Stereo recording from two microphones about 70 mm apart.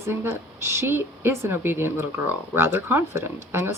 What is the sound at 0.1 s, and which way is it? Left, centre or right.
Speech, right.